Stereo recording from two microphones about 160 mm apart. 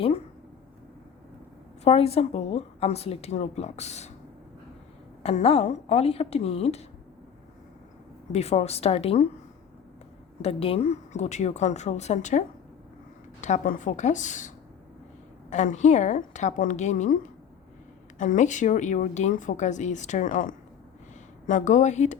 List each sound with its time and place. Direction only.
1.8 s a woman's voice: 40° left (ahead or behind)
5.2 s a woman's voice: 40° left (ahead or behind)
8.3 s a woman's voice: 40° left (ahead or behind)
10.4 s speech: 40° left (ahead or behind)
18.2 s speech: 50° left (ahead or behind)